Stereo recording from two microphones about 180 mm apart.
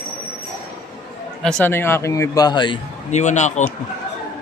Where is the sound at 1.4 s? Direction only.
5° left (ahead or behind); by 2.8 s 25° left (ahead or behind).